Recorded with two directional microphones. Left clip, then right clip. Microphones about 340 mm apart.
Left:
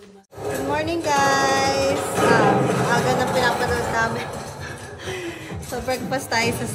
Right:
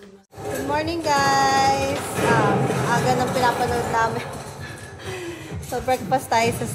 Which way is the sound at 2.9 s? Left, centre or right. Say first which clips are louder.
Left 1 dB; centre.